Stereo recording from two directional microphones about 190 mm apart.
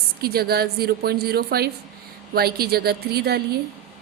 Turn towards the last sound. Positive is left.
turn(degrees=-55)  # may be behind; listen again after turning